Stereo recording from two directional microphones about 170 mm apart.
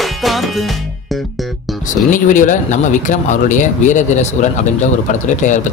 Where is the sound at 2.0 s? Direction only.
50° left (ahead or behind).